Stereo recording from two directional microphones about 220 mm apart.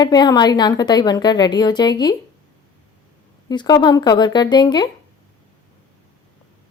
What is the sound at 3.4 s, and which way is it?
A woman's voice, 20° left (ahead or behind).